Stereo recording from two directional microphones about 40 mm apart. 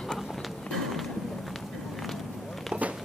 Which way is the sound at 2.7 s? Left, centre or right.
Right.